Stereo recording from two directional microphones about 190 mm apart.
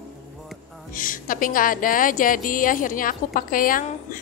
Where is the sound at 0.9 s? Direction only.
45° left (ahead or behind).